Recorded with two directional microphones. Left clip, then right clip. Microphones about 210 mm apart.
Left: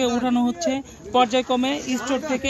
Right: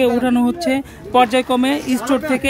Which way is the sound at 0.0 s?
5° right (ahead or behind).